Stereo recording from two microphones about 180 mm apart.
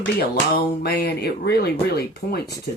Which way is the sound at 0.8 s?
60° left (ahead or behind).